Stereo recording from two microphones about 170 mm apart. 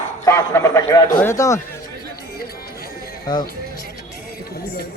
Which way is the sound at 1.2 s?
15° left (ahead or behind).